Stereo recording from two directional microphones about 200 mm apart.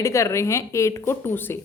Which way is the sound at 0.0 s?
15° left (ahead or behind).